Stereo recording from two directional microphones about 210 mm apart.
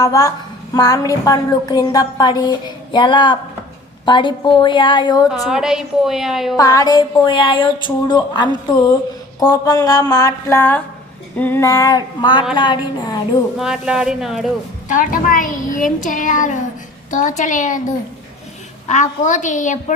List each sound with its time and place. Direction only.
0.0 s a woman's voice: 15° left (ahead or behind)
5.3 s a woman's voice: 5° right (ahead or behind)
6.6 s a woman's voice: 15° left (ahead or behind)
13.6 s a woman's voice: 5° right (ahead or behind)
14.8 s a child's voice: 40° left (ahead or behind)